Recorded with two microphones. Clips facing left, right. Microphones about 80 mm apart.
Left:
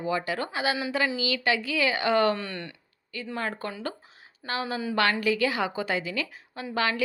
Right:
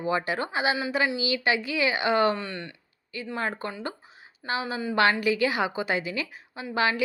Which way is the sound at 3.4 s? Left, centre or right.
Right.